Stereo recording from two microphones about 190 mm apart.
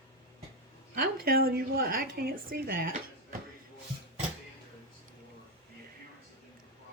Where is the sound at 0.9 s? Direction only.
50° right (ahead or behind).